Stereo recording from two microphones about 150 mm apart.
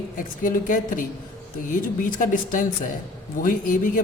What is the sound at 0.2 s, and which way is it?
Speech, 60° left (ahead or behind).